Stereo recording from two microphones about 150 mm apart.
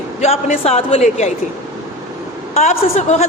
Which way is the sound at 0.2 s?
45° left (ahead or behind).